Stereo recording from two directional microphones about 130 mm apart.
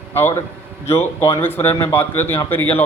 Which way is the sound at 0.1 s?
15° left (ahead or behind).